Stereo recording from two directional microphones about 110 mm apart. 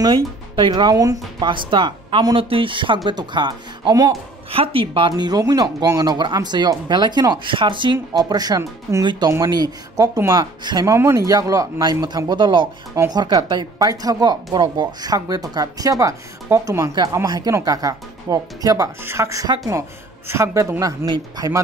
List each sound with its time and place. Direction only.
0.6 s speech: 40° right (ahead or behind)
1.4 s speech: 50° right (ahead or behind)
4.5 s speech: 55° right (ahead or behind); by 10.9 s 40° right (ahead or behind)
10.9 s speech: 25° right (ahead or behind)
20.2 s speech: 25° right (ahead or behind)